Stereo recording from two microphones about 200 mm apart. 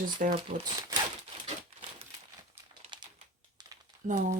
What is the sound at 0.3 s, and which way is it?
Speech, 20° right (ahead or behind).